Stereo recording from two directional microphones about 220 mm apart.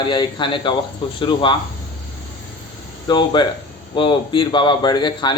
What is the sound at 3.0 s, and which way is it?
A man's voice, 20° left (ahead or behind).